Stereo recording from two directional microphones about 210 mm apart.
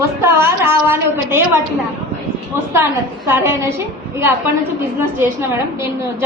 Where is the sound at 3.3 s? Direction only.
15° right (ahead or behind).